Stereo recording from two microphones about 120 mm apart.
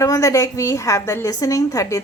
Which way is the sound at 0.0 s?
25° left (ahead or behind).